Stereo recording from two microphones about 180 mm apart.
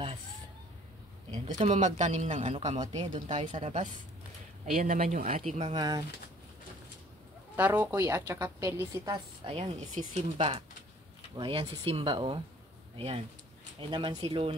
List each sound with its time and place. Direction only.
1.3 s a woman's voice: 35° right (ahead or behind)
5.0 s speech: 35° right (ahead or behind); by 6.0 s 20° right (ahead or behind)
7.5 s a woman's voice: 10° right (ahead or behind)
9.5 s speech: 40° right (ahead or behind)